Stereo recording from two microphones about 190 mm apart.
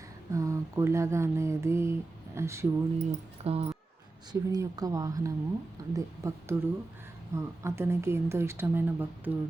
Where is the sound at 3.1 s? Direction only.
30° right (ahead or behind).